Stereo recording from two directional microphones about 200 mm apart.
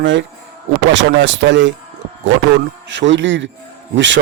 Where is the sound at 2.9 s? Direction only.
65° right (ahead or behind).